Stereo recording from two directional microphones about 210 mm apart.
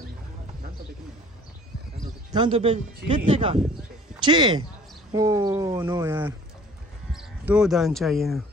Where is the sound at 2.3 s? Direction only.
25° right (ahead or behind).